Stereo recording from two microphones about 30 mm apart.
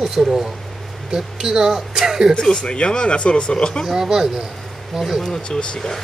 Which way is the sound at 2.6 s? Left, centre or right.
Left.